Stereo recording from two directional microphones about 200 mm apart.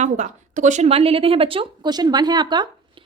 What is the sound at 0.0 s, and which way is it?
A woman's voice, 35° right (ahead or behind).